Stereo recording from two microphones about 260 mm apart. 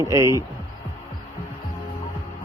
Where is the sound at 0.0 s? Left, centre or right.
Centre.